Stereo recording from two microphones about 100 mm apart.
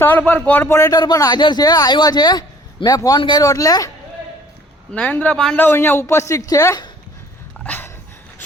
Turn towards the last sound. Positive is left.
turn(degrees=20)  # may be behind; listen again after turning